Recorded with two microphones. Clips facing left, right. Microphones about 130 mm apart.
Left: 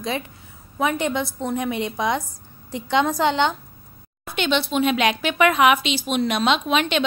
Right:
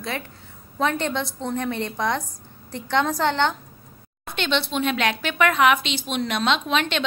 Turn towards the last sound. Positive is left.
turn(degrees=10)  # may be behind; listen again after turning